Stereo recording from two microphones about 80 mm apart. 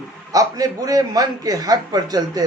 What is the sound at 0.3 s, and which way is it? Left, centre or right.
A man's voice, right.